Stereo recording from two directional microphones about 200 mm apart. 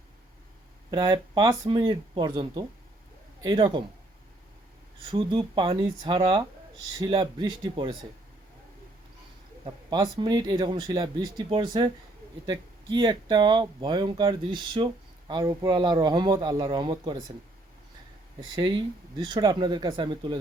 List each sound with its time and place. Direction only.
0.9 s speech: 15° right (ahead or behind)
5.1 s speech: 25° right (ahead or behind)
9.6 s speech: 20° right (ahead or behind)
18.3 s speech: 20° right (ahead or behind)